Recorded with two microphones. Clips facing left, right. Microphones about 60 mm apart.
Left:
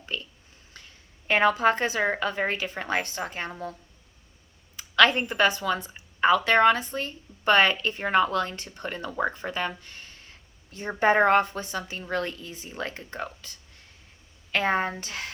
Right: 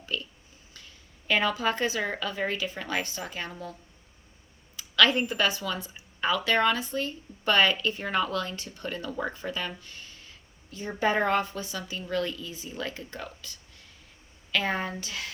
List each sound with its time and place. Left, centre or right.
0.0 s a sound: left
0.7 s a woman's voice: left
4.8 s speech: left